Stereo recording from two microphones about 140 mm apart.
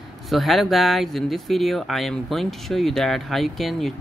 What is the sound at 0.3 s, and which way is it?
Speech, centre (ahead or behind).